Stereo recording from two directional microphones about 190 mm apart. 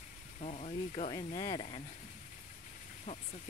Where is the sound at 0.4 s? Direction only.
35° left (ahead or behind).